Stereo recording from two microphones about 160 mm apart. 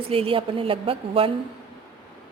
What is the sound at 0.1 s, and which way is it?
A woman's voice, 35° right (ahead or behind).